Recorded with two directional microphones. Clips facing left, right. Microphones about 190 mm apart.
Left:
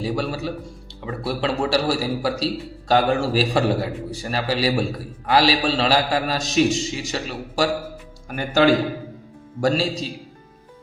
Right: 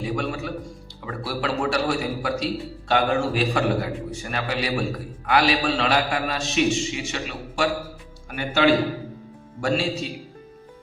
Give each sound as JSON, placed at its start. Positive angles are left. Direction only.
{"t": 0.0, "sound": "a man's voice", "side_deg": 35}